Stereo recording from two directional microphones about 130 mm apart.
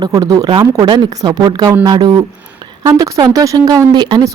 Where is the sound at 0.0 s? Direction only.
25° right (ahead or behind).